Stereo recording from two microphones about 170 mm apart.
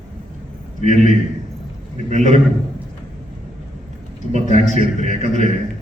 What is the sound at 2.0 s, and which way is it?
Speech, 40° right (ahead or behind).